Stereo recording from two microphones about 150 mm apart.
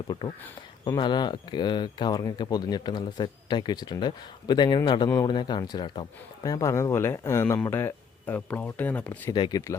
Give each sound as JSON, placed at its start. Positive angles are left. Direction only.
{"t": 0.1, "sound": "speech", "side_deg": 30}
{"t": 9.3, "sound": "speech", "side_deg": 30}